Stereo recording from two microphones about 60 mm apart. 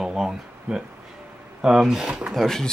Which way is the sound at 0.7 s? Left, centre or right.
Centre.